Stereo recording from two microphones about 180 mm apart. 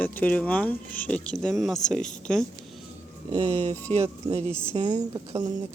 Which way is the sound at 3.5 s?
40° right (ahead or behind).